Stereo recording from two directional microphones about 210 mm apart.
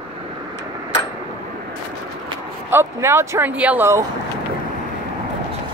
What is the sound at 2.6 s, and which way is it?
Speech, 10° right (ahead or behind).